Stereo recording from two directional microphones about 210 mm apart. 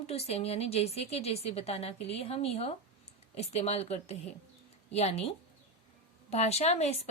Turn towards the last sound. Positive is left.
turn(degrees=30)  # may be behind; listen again after turning